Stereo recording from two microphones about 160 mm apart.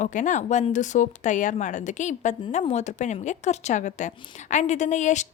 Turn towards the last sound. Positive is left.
turn(degrees=50)  # may be behind; listen again after turning